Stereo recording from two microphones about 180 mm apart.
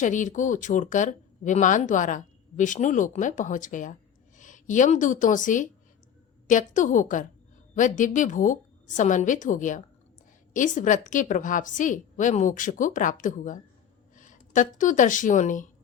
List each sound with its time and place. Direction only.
0.0 s speech: 45° left (ahead or behind)